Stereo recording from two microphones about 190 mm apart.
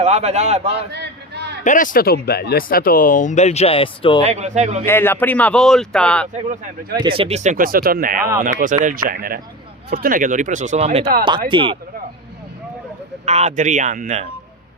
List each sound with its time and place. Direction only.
0.0 s speech: 35° right (ahead or behind)
0.9 s a sound: 60° right (ahead or behind)
1.6 s speech: 45° left (ahead or behind); by 4.2 s 30° left (ahead or behind)
4.2 s speech: 35° right (ahead or behind)
4.9 s speech: 10° left (ahead or behind)
6.3 s speech: 35° right (ahead or behind)
13.2 s speech: 35° right (ahead or behind)